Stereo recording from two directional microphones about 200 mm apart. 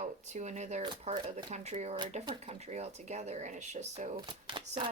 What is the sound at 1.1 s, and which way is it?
Speech, 35° right (ahead or behind).